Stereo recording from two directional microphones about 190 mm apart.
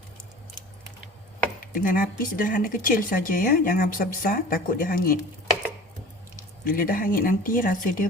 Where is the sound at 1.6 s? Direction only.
45° left (ahead or behind).